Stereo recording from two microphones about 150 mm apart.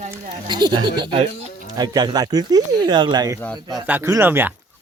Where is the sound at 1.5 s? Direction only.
65° left (ahead or behind).